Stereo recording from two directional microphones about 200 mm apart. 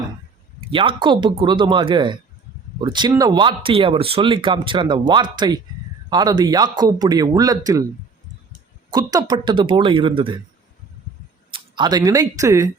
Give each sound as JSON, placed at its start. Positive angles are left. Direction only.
{"t": 0.7, "sound": "speech", "side_deg": -25}
{"t": 8.9, "sound": "speech", "side_deg": -20}
{"t": 11.5, "sound": "speech", "side_deg": -20}